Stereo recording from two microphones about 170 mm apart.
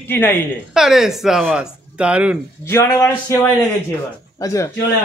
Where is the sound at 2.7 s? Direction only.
15° left (ahead or behind).